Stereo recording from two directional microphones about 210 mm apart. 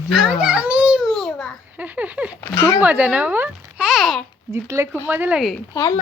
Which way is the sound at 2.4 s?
10° left (ahead or behind).